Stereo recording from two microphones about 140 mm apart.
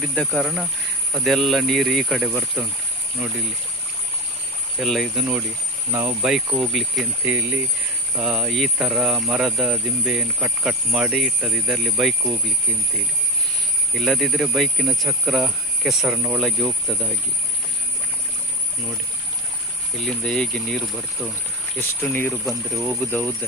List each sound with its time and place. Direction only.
0.0 s speech: centre (ahead or behind)
4.8 s speech: centre (ahead or behind)
5.9 s speech: 15° right (ahead or behind)
6.3 s speech: 5° right (ahead or behind)
13.9 s speech: centre (ahead or behind)
20.0 s speech: 5° left (ahead or behind)
21.8 s speech: 15° left (ahead or behind)
22.4 s speech: centre (ahead or behind)
23.0 s speech: 10° left (ahead or behind)